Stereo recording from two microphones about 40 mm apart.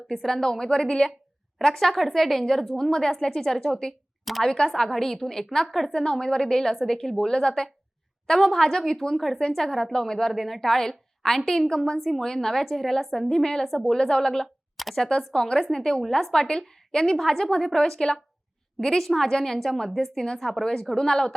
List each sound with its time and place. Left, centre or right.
0.1 s a woman's voice: centre
1.5 s a woman's voice: centre
5.9 s a woman's voice: centre
11.9 s a woman's voice: centre
12.2 s a woman's voice: centre
14.4 s a sound: centre
15.3 s a woman's voice: left